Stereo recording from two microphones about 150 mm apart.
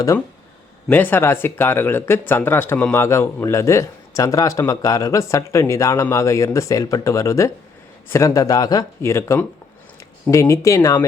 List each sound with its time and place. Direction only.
0.9 s speech: 15° left (ahead or behind)